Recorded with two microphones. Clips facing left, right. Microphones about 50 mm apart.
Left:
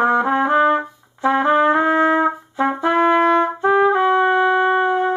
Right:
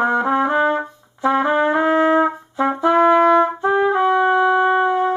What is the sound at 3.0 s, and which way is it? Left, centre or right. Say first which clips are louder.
Trumpet: right 2 dB; centre.